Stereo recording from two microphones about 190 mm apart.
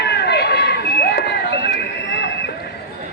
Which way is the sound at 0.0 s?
60° left (ahead or behind).